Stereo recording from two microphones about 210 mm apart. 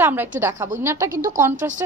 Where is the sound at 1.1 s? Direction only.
40° right (ahead or behind).